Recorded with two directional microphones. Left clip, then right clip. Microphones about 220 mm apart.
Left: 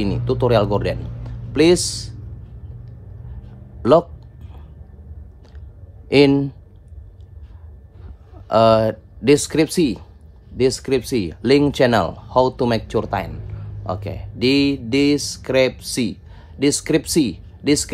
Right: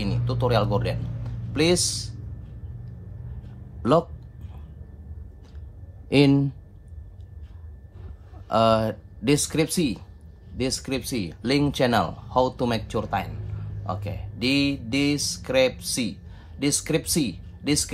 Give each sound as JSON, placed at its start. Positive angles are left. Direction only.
{"t": 0.0, "sound": "speech", "side_deg": 45}
{"t": 6.0, "sound": "a man's voice", "side_deg": 40}
{"t": 8.5, "sound": "speech", "side_deg": 40}